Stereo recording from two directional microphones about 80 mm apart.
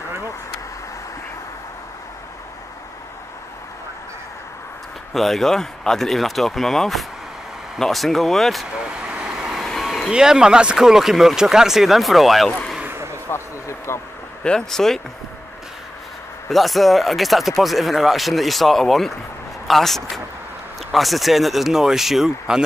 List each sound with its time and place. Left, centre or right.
5.1 s speech: centre
8.7 s vehicle: centre
9.7 s vehicle: centre
10.0 s speech: centre
12.8 s a sound: right
13.3 s speech: left
14.4 s speech: centre
16.4 s speech: centre